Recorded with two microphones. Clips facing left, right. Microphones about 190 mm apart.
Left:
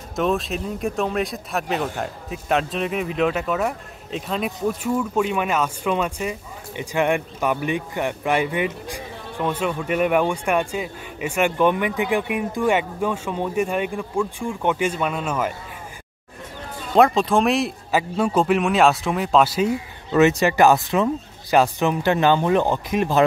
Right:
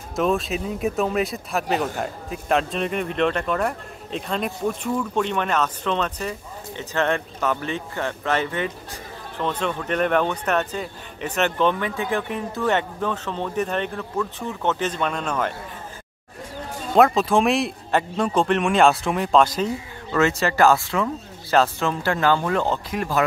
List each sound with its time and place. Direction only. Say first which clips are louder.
0.1 s speech: even; centre (ahead or behind)
16.9 s speech: even; centre (ahead or behind)
20.1 s speech: left 4 dB; 20° left (ahead or behind)